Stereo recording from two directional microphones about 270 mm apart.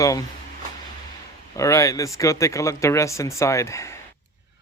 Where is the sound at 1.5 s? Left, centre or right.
Centre.